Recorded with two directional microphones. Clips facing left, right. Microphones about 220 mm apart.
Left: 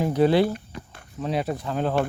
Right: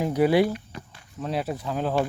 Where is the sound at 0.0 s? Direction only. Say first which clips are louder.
Left 1 dB; 10° right (ahead or behind).